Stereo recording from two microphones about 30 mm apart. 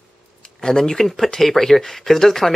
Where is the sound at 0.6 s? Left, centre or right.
Centre.